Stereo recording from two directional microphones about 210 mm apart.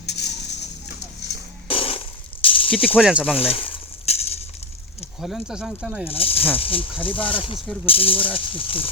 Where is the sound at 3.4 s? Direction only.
30° left (ahead or behind).